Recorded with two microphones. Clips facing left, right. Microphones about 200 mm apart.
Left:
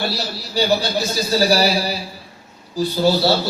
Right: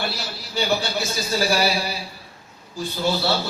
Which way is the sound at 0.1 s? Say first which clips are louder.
Left 5 dB; 35° left (ahead or behind).